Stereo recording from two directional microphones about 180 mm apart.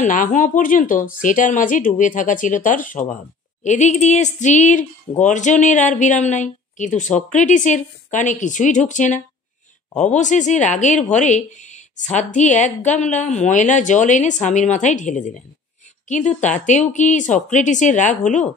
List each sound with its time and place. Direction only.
0.0 s a woman's voice: 45° left (ahead or behind)